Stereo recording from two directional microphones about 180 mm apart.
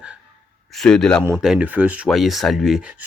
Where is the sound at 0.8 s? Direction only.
Centre (ahead or behind).